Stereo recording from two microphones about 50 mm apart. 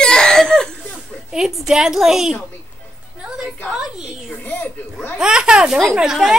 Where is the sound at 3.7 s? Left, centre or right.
Centre.